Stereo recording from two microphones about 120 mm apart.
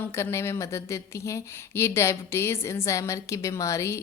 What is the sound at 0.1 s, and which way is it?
Speech, 25° left (ahead or behind).